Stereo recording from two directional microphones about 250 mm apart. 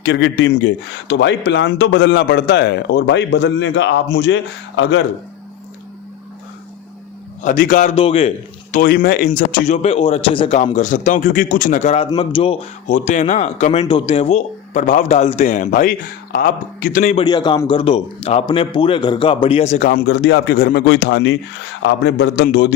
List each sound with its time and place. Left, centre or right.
0.0 s speech: left
7.4 s a man's voice: left
8.7 s a man's voice: left
17.2 s a man's voice: centre
20.1 s speech: left